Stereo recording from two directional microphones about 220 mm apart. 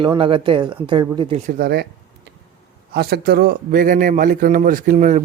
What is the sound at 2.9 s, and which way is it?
Speech, 45° right (ahead or behind).